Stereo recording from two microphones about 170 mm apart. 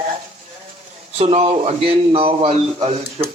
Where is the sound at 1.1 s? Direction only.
35° right (ahead or behind).